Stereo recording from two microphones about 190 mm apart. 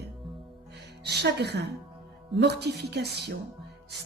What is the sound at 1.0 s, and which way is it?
A woman's voice, 60° right (ahead or behind).